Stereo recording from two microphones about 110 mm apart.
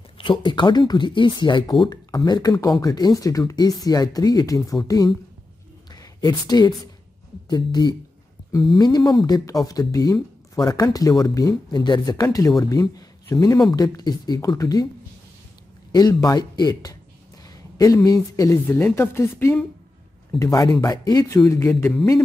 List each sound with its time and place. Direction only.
0.2 s speech: 50° left (ahead or behind)
15.9 s speech: 35° left (ahead or behind)
21.3 s speech: 25° left (ahead or behind)